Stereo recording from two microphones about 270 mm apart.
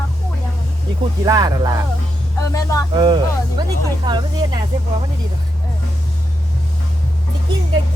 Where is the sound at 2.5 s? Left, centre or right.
Centre.